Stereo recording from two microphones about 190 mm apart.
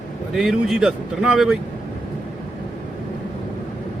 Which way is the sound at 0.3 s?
Centre (ahead or behind).